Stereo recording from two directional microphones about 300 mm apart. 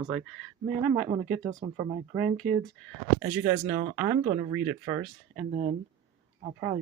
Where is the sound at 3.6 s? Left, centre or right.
Right.